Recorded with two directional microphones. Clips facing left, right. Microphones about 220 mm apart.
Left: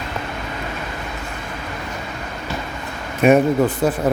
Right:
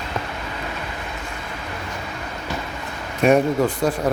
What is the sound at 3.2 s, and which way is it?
Speech, 5° left (ahead or behind).